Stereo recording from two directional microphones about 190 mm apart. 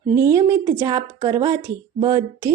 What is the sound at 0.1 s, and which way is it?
Speech, 15° right (ahead or behind).